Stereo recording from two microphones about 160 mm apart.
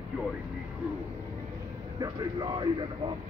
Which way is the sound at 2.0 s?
25° right (ahead or behind).